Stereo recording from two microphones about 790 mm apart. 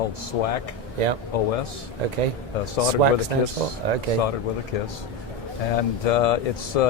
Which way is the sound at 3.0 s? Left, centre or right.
Right.